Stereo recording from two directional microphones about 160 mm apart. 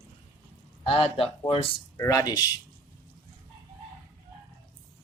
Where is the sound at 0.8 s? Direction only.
40° left (ahead or behind).